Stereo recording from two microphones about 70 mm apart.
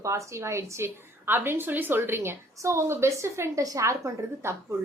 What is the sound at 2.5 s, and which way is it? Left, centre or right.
A woman's voice, right.